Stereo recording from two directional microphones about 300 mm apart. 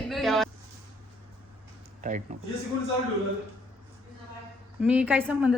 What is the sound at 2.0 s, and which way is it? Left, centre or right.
Speech, right.